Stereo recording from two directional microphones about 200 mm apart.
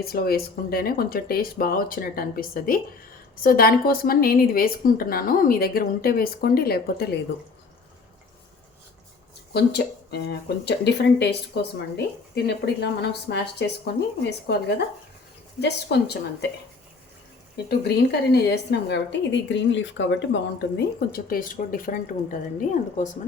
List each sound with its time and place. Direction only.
0.0 s a woman's voice: 50° left (ahead or behind)
9.5 s speech: 55° left (ahead or behind)
17.7 s speech: 55° left (ahead or behind)